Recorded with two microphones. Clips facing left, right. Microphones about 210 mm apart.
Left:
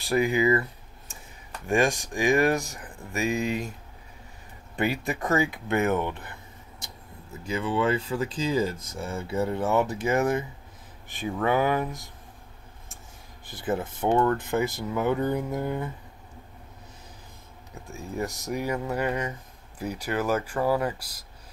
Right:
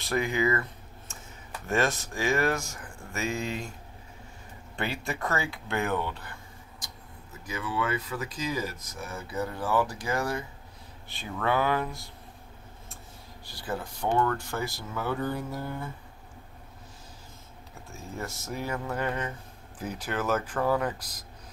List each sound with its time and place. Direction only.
0.1 s speech: 15° left (ahead or behind)
1.7 s speech: 15° left (ahead or behind)
4.7 s speech: 15° left (ahead or behind)
7.4 s speech: 30° left (ahead or behind)
13.5 s speech: 20° left (ahead or behind)
17.8 s speech: 15° left (ahead or behind)